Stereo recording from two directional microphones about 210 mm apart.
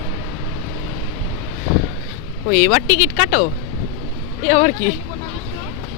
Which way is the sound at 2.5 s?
45° left (ahead or behind).